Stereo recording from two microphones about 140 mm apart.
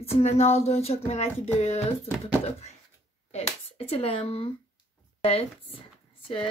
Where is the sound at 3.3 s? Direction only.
45° left (ahead or behind).